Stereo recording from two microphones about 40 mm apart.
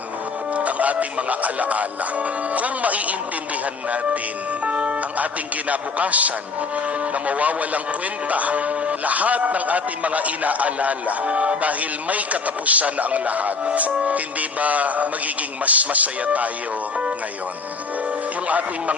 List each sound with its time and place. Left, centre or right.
0.5 s a man's voice: right
4.6 s a man's voice: right
18.4 s a man's voice: right